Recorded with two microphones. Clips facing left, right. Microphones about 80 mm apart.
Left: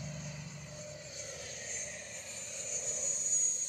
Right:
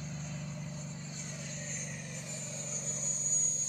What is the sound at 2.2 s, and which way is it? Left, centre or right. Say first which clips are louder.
Vehicle: right 4 dB; right.